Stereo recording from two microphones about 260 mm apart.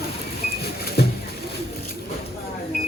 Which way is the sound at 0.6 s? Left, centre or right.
Left.